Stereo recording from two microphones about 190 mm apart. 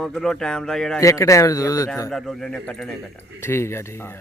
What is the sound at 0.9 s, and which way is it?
Speech, 15° left (ahead or behind).